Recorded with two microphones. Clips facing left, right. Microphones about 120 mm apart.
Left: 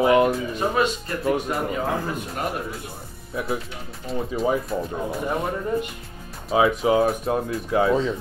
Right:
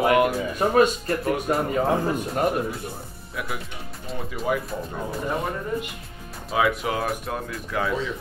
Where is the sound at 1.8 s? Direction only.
30° right (ahead or behind).